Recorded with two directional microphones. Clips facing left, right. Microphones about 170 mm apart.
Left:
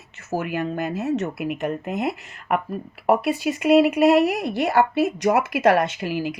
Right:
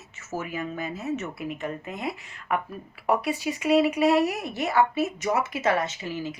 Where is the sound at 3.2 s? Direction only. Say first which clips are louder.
Left 5 dB; 60° left (ahead or behind).